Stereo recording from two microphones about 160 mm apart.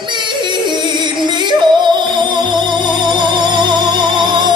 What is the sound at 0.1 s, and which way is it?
Music, 30° right (ahead or behind).